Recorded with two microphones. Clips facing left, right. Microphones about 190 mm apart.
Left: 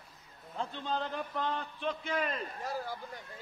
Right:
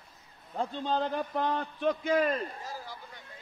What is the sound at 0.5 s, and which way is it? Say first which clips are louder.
A man's voice: right 5 dB; 40° right (ahead or behind).